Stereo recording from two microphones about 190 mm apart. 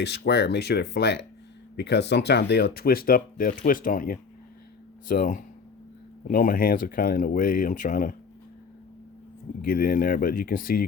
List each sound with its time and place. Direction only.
0.0 s speech: 60° left (ahead or behind); by 8.1 s 45° left (ahead or behind)
9.6 s speech: 50° left (ahead or behind)